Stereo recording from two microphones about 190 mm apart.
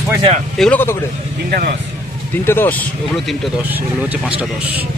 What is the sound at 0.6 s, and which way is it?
Speech, 5° left (ahead or behind).